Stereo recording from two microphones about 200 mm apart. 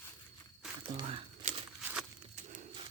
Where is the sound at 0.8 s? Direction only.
25° right (ahead or behind).